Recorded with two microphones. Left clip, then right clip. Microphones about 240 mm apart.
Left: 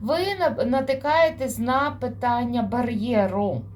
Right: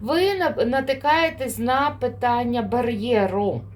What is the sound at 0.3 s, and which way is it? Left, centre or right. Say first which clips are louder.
Speech: right 2 dB; right.